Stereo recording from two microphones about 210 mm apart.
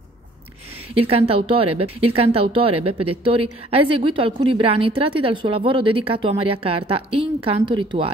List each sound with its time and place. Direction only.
0.9 s a woman's voice: 25° right (ahead or behind)